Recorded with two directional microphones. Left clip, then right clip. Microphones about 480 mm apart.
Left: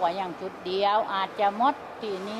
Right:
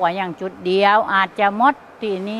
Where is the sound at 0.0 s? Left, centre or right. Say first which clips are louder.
Right 7 dB; right.